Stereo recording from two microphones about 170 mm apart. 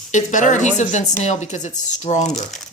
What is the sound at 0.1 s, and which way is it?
A woman's voice, 45° left (ahead or behind).